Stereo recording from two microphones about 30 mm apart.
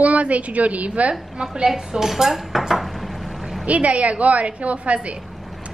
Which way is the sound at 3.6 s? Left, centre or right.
Right.